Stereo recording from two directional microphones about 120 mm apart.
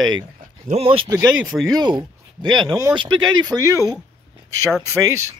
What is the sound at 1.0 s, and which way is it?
Speech, 30° right (ahead or behind).